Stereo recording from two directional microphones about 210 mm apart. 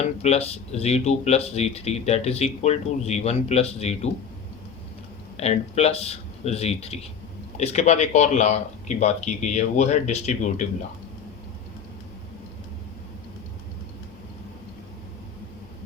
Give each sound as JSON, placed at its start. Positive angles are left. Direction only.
{"t": 0.0, "sound": "speech", "side_deg": 30}
{"t": 5.4, "sound": "speech", "side_deg": 30}